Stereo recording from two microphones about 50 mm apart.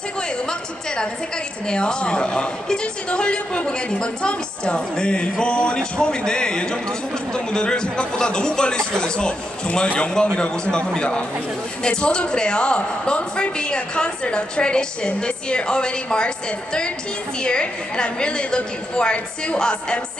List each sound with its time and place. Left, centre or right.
1.7 s a man's voice: centre
17.4 s a man's voice: centre